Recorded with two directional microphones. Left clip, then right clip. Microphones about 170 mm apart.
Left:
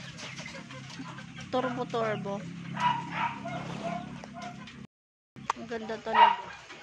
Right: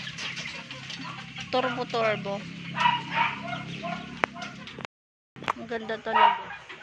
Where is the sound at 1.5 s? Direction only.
15° left (ahead or behind).